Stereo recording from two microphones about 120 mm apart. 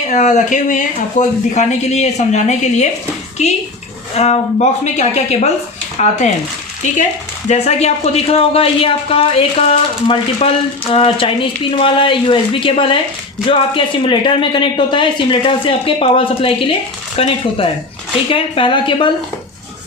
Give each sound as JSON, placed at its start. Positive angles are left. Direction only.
{"t": 0.1, "sound": "speech", "side_deg": 85}
{"t": 1.5, "sound": "a woman's voice", "side_deg": 70}